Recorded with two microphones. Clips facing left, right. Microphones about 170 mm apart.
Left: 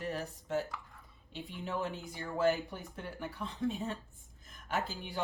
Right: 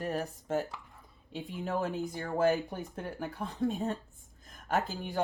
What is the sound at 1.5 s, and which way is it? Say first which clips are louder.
Speech: right 5 dB; 40° right (ahead or behind).